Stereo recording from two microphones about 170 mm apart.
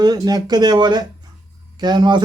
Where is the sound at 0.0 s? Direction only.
25° right (ahead or behind).